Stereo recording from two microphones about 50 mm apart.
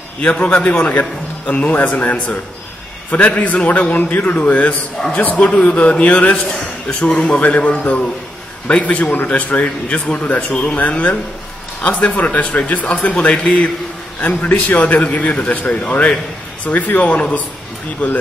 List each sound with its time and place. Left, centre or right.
0.2 s a man's voice: left
6.3 s a man's voice: centre
9.1 s a man's voice: left